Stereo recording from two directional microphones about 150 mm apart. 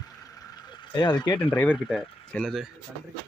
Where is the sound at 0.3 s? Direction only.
25° left (ahead or behind).